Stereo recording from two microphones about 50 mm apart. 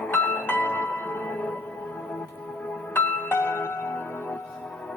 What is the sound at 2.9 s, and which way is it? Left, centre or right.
Music, left.